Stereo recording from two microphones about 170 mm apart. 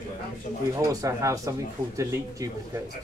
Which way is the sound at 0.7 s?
20° right (ahead or behind).